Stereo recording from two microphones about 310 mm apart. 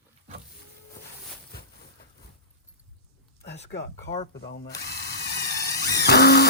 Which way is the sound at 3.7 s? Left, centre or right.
Left.